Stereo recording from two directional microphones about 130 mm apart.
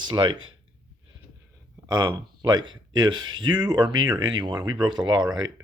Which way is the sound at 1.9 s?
30° right (ahead or behind).